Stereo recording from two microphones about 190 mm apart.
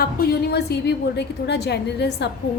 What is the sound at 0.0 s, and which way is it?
A woman's voice, 60° left (ahead or behind).